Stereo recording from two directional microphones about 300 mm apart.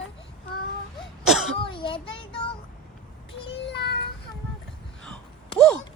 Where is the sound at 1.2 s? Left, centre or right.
Centre.